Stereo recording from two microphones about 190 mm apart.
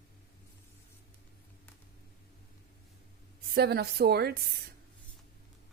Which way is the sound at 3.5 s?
55° right (ahead or behind).